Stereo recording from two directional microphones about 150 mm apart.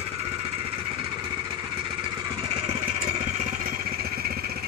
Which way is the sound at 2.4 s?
40° right (ahead or behind).